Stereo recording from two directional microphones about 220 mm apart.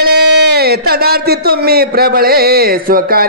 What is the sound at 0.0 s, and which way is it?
Speech, 45° right (ahead or behind).